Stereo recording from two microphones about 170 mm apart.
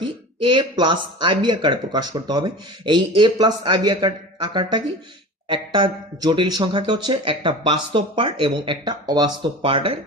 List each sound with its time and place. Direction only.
0.0 s speech: 25° right (ahead or behind)